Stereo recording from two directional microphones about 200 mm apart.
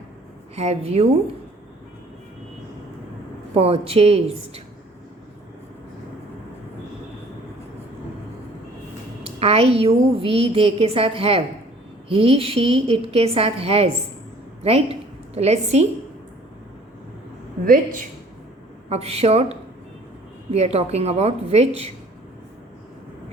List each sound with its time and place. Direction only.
0.5 s a woman's voice: 30° right (ahead or behind)
3.5 s a woman's voice: 30° right (ahead or behind)
9.2 s a woman's voice: 30° right (ahead or behind)
18.9 s a woman's voice: 30° right (ahead or behind)